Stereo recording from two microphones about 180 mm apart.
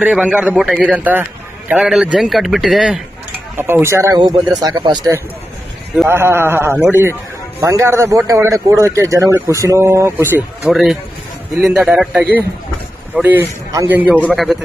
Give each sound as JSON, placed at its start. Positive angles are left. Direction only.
{"t": 0.0, "sound": "a man's voice", "side_deg": -5}
{"t": 3.5, "sound": "speech", "side_deg": -10}
{"t": 6.0, "sound": "a man's voice", "side_deg": -15}
{"t": 10.6, "sound": "a man's voice", "side_deg": 0}